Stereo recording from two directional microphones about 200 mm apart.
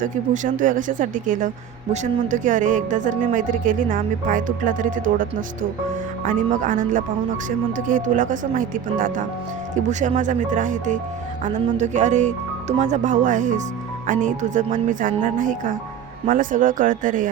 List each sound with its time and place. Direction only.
0.0 s speech: 40° right (ahead or behind)